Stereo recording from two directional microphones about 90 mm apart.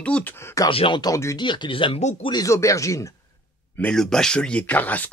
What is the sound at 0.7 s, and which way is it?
Speech, 75° left (ahead or behind).